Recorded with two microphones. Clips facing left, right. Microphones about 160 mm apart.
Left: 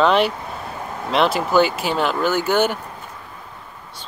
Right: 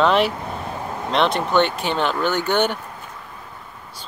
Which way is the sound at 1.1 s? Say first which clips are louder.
Left 2 dB; 5° left (ahead or behind).